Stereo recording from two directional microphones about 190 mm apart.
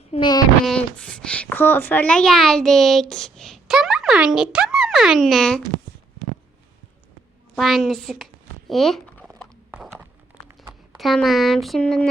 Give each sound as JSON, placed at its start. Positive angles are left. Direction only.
{"t": 0.1, "sound": "speech", "side_deg": 25}
{"t": 0.6, "sound": "a child's voice", "side_deg": 5}
{"t": 7.5, "sound": "a sound", "side_deg": 0}
{"t": 10.6, "sound": "speech", "side_deg": 0}